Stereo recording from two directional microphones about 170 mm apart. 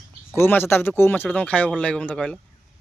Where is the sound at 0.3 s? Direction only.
10° left (ahead or behind).